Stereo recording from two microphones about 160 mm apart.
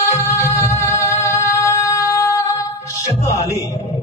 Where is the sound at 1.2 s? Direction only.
15° left (ahead or behind).